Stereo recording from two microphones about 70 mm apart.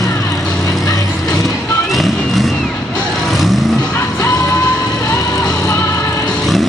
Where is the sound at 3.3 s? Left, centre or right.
Centre.